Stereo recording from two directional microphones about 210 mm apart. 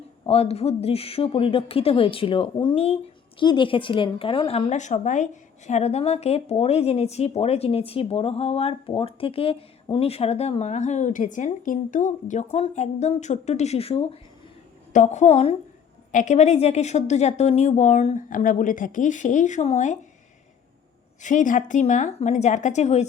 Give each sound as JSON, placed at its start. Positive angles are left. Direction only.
{"t": 0.3, "sound": "a woman's voice", "side_deg": 30}
{"t": 21.2, "sound": "a woman's voice", "side_deg": 35}